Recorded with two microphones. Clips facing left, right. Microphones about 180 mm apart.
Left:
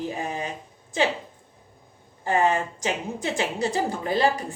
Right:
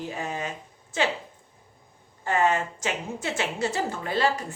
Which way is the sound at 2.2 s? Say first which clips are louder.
Left 2 dB; 30° left (ahead or behind).